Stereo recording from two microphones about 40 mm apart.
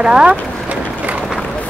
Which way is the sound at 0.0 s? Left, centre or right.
Right.